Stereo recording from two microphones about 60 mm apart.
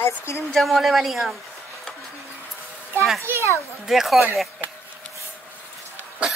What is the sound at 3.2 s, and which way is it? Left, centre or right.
Speech, right.